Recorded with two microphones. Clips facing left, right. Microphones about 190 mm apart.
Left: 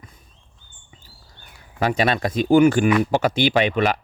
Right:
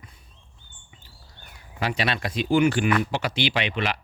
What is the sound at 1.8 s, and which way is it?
Speech, 45° left (ahead or behind).